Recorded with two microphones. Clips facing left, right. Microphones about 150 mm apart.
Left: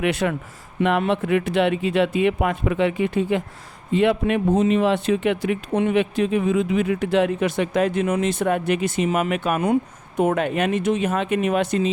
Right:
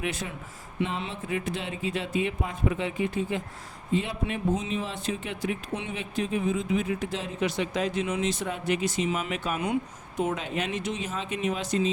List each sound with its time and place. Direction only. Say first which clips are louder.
0.0 s speech: left 11 dB; 70° left (ahead or behind)